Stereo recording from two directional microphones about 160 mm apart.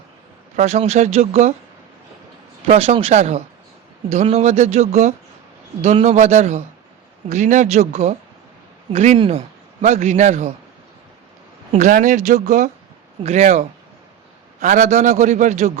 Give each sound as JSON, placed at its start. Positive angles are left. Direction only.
{"t": 0.6, "sound": "a man's voice", "side_deg": -45}
{"t": 2.6, "sound": "a man's voice", "side_deg": -35}
{"t": 9.1, "sound": "speech", "side_deg": -30}
{"t": 9.8, "sound": "a man's voice", "side_deg": -45}
{"t": 11.8, "sound": "a man's voice", "side_deg": -55}